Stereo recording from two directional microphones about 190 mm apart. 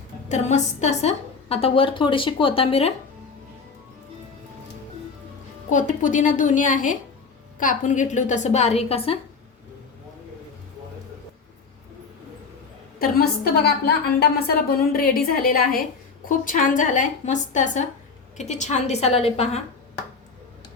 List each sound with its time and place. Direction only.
0.3 s a woman's voice: 35° left (ahead or behind)
5.7 s a woman's voice: 40° left (ahead or behind)
13.0 s a woman's voice: 55° left (ahead or behind); by 19.5 s 35° left (ahead or behind)